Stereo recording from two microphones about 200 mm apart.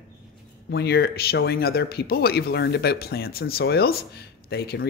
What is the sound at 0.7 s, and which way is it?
Speech, 55° left (ahead or behind).